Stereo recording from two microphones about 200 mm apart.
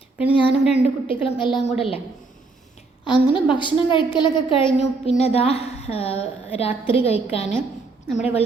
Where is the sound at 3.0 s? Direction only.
25° left (ahead or behind).